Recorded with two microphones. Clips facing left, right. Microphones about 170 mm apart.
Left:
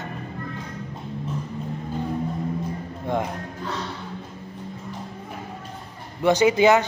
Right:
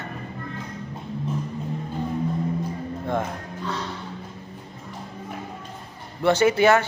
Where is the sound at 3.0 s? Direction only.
15° left (ahead or behind).